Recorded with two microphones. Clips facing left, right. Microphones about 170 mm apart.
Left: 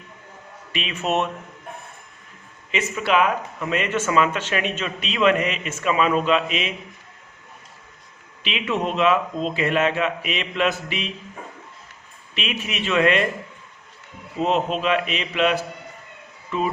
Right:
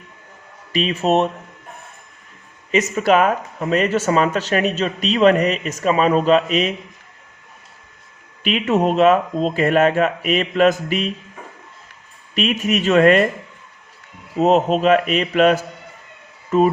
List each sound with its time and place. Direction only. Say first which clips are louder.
0.7 s speech: right 7 dB; 35° right (ahead or behind)
2.7 s speech: right 5 dB; 40° right (ahead or behind)
8.4 s speech: right 7 dB; 45° right (ahead or behind)
12.3 s speech: right 10 dB; 45° right (ahead or behind)
14.3 s speech: right 7 dB; 45° right (ahead or behind)